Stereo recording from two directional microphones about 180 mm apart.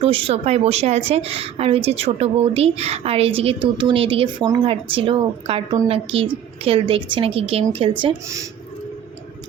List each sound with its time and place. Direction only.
0.0 s a woman's voice: 30° right (ahead or behind)